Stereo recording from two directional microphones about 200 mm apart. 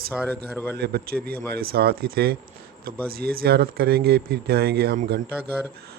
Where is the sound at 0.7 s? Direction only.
55° right (ahead or behind).